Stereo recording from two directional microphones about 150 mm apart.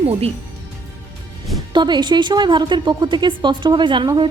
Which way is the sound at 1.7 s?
30° right (ahead or behind).